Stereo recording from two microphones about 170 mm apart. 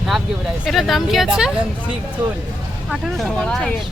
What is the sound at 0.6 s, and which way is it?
Speech, centre (ahead or behind).